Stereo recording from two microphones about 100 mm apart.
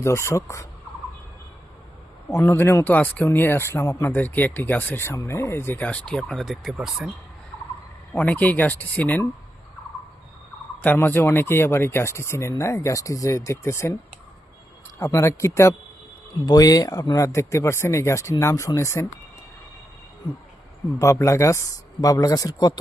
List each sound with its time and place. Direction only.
0.0 s speech: 30° left (ahead or behind)
2.3 s speech: 25° left (ahead or behind); by 7.1 s 5° right (ahead or behind)
8.1 s speech: 15° left (ahead or behind)
10.8 s speech: 20° left (ahead or behind)
14.9 s speech: 30° left (ahead or behind)
16.5 s speech: 40° left (ahead or behind)
21.0 s speech: 30° left (ahead or behind)